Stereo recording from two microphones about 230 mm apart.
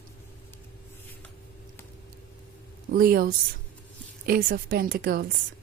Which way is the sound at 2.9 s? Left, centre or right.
Right.